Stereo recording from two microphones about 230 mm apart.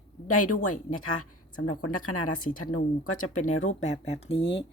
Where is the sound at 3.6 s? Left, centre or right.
Left.